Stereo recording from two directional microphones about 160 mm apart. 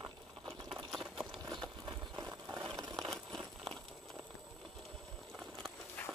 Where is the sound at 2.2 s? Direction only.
20° right (ahead or behind).